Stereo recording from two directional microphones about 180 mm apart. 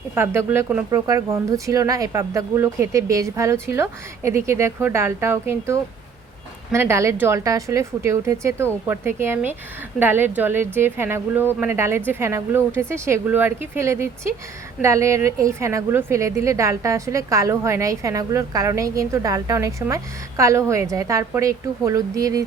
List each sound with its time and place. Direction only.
0.1 s a woman's voice: 15° right (ahead or behind)